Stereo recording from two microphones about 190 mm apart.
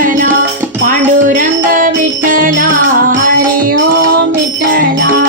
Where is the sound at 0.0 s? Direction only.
45° right (ahead or behind).